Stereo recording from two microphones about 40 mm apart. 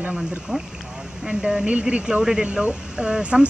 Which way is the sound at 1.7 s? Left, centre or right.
Right.